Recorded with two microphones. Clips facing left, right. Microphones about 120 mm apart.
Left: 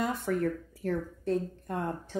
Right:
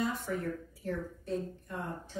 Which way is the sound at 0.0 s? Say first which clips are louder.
Left 5 dB; 65° left (ahead or behind).